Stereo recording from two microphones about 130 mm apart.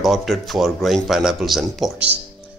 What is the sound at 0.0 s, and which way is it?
Speech, centre (ahead or behind).